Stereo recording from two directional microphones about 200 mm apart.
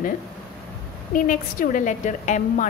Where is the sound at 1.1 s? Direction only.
40° left (ahead or behind).